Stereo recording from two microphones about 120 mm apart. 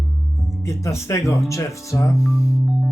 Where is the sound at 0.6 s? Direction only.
25° left (ahead or behind).